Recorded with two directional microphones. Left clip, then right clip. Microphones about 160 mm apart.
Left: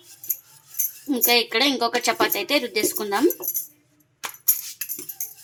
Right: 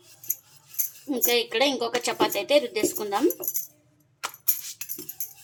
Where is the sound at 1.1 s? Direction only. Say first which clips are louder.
Left 4 dB; 15° left (ahead or behind).